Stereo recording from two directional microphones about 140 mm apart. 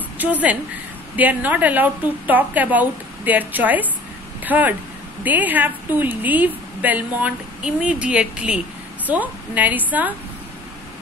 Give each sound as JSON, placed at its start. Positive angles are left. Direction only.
{"t": 0.2, "sound": "a woman's voice", "side_deg": -10}